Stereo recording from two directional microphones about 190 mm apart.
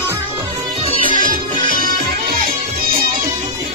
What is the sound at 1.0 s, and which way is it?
Music, 45° right (ahead or behind).